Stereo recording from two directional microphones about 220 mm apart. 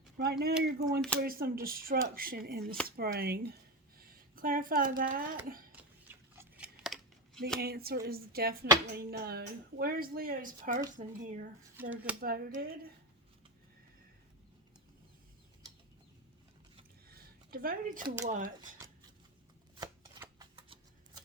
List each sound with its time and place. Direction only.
0.2 s speech: 45° right (ahead or behind)
6.3 s scissors: 10° right (ahead or behind)
6.8 s a sound: centre (ahead or behind)
7.6 s speech: 45° right (ahead or behind)
11.8 s speech: 5° right (ahead or behind)
12.2 s speech: 40° right (ahead or behind)
17.1 s a sound: 45° right (ahead or behind)
18.3 s speech: 35° right (ahead or behind)
19.7 s chopping: 20° right (ahead or behind)